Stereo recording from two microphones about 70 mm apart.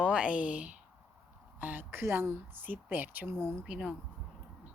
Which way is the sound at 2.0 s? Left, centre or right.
Right.